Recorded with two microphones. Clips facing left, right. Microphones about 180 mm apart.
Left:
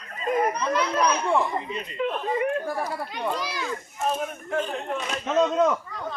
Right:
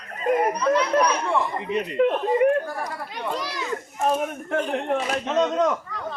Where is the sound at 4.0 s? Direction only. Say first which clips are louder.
Right 4 dB; 60° right (ahead or behind).